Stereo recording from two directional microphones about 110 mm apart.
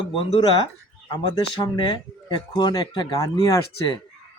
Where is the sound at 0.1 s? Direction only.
55° left (ahead or behind); by 4.0 s 35° left (ahead or behind).